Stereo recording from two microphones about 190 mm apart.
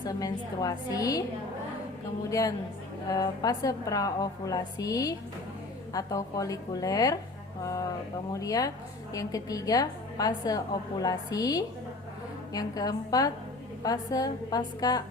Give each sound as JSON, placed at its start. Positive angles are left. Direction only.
{"t": 0.0, "sound": "a woman's voice", "side_deg": 20}
{"t": 3.1, "sound": "a woman's voice", "side_deg": 20}
{"t": 7.6, "sound": "a sound", "side_deg": 20}
{"t": 8.3, "sound": "a woman's voice", "side_deg": 20}